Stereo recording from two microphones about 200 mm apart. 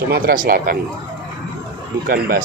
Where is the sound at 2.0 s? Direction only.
50° right (ahead or behind).